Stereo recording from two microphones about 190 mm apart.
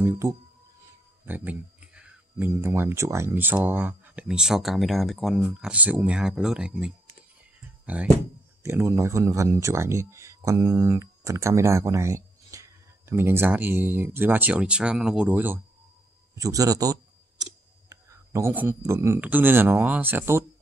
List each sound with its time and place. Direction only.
0.0 s speech: 15° right (ahead or behind)
17.8 s a sound: 15° right (ahead or behind)
18.9 s speech: 15° right (ahead or behind)